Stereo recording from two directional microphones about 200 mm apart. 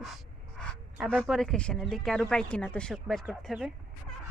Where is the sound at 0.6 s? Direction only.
5° left (ahead or behind).